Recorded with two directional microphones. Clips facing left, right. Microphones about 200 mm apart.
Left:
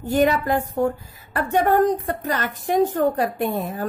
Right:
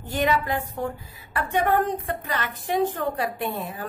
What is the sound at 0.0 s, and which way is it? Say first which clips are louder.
A woman's voice: left 5 dB; 45° left (ahead or behind).